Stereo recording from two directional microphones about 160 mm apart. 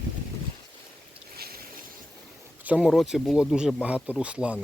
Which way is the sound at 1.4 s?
70° right (ahead or behind).